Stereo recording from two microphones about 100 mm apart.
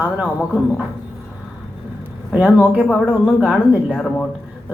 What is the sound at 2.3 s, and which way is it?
Speech, 15° right (ahead or behind).